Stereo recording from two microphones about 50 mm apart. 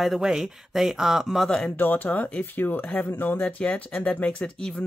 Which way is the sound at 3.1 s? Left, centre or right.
Left.